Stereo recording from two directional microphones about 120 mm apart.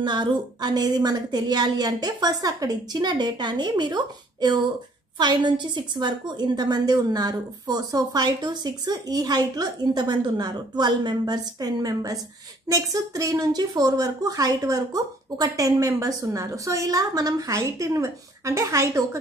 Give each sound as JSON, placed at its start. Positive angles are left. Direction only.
{"t": 0.0, "sound": "a woman's voice", "side_deg": -40}